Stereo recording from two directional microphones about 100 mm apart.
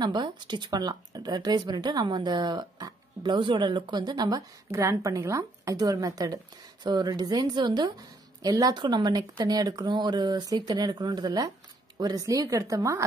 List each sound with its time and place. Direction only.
0.0 s speech: 45° right (ahead or behind)
4.6 s a woman's voice: 30° right (ahead or behind)